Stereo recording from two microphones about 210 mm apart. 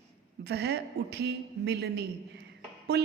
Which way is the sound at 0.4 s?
50° right (ahead or behind).